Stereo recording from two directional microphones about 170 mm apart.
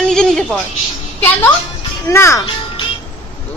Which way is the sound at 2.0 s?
15° left (ahead or behind).